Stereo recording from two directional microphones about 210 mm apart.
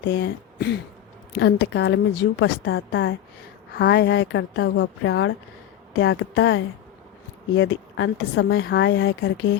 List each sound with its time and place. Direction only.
0.0 s a woman's voice: 55° left (ahead or behind)
4.6 s a woman's voice: 70° left (ahead or behind)
8.6 s speech: 55° left (ahead or behind)